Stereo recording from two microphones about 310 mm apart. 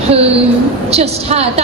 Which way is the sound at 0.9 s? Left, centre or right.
Centre.